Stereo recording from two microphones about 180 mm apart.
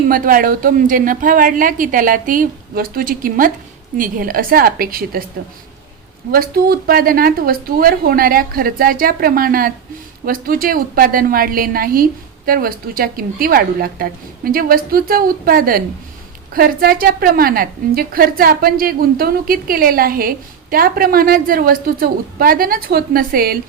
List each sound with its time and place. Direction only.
0.1 s a woman's voice: 50° right (ahead or behind)
6.3 s a woman's voice: 55° right (ahead or behind)